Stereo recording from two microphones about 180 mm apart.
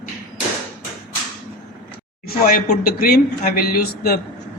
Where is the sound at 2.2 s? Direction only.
55° left (ahead or behind).